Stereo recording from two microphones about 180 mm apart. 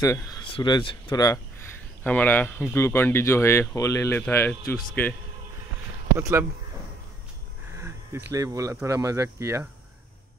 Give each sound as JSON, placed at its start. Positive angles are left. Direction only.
{"t": 0.0, "sound": "speech", "side_deg": 20}
{"t": 6.1, "sound": "speech", "side_deg": -15}
{"t": 7.7, "sound": "a sound", "side_deg": -15}
{"t": 8.3, "sound": "speech", "side_deg": -20}